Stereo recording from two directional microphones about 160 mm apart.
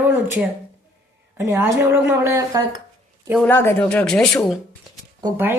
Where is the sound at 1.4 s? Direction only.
15° right (ahead or behind).